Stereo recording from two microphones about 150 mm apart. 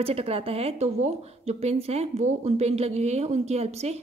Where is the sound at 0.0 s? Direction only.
40° right (ahead or behind).